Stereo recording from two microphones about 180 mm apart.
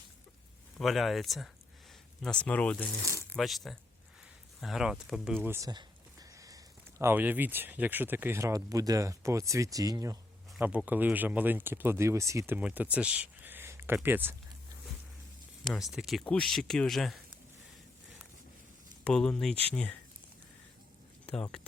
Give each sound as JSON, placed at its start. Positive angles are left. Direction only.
{"t": 0.8, "sound": "speech", "side_deg": 0}
{"t": 10.6, "sound": "speech", "side_deg": -10}
{"t": 15.7, "sound": "speech", "side_deg": 0}
{"t": 19.0, "sound": "speech", "side_deg": 5}